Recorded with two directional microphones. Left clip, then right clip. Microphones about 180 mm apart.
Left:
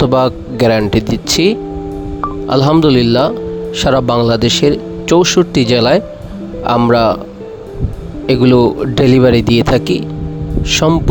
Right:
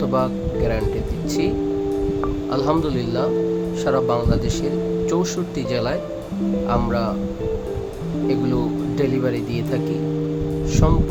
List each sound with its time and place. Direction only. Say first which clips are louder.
0.1 s a man's voice: left 9 dB; 60° left (ahead or behind)
2.5 s speech: left 12 dB; 50° left (ahead or behind)
8.3 s speech: left 13 dB; 55° left (ahead or behind)